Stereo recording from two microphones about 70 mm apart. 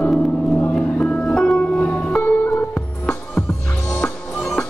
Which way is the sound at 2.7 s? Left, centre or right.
Centre.